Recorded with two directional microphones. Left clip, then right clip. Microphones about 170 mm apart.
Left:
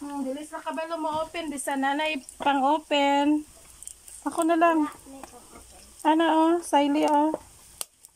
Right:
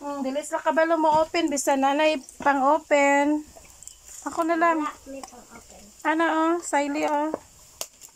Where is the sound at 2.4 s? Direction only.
5° left (ahead or behind).